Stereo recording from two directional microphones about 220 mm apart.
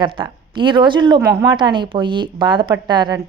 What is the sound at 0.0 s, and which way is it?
A woman's voice, 20° right (ahead or behind).